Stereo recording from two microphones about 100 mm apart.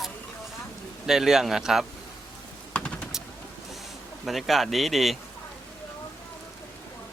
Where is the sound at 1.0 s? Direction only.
5° right (ahead or behind).